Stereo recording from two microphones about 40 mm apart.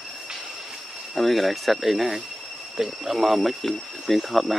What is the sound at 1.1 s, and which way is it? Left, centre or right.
Speech, centre.